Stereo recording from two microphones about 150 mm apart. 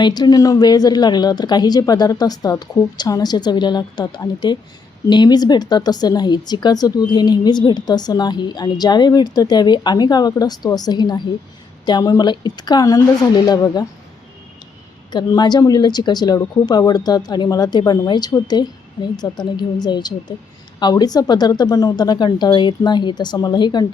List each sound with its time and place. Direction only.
0.0 s speech: 25° left (ahead or behind)
15.1 s speech: 30° left (ahead or behind)